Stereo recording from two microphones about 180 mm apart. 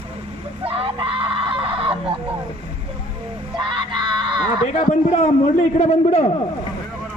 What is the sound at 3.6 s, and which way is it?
Crowd, 25° right (ahead or behind).